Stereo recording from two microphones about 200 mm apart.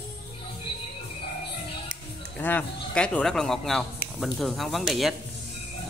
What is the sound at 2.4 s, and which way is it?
Speech, 10° left (ahead or behind).